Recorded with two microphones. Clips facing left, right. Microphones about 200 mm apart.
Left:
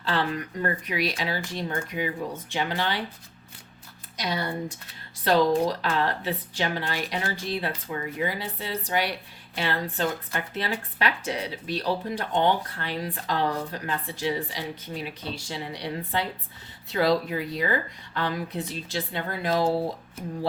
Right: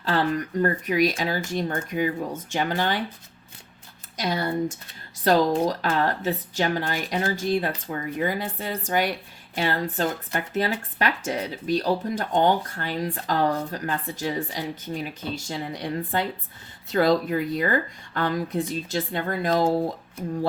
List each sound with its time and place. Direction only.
0.0 s speech: 45° right (ahead or behind)
4.2 s speech: 45° right (ahead or behind)